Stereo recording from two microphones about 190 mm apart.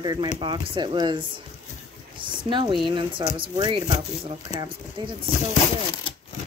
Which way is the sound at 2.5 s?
25° right (ahead or behind).